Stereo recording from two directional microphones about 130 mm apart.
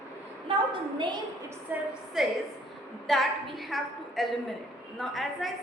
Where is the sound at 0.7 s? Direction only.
35° right (ahead or behind).